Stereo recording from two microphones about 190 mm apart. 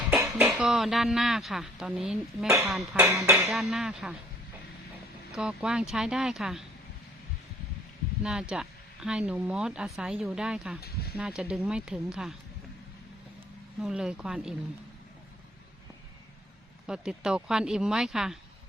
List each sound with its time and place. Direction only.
0.1 s speech: 10° right (ahead or behind)
5.3 s speech: 5° right (ahead or behind)
8.2 s speech: 5° right (ahead or behind)
10.8 s speech: 55° left (ahead or behind)
11.2 s speech: 5° right (ahead or behind)
13.7 s speech: 5° right (ahead or behind)
16.8 s speech: 5° right (ahead or behind)